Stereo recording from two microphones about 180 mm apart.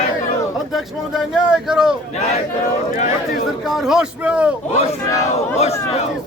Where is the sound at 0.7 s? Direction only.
Centre (ahead or behind).